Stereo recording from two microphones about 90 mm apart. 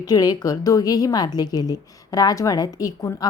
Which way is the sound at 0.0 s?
45° left (ahead or behind).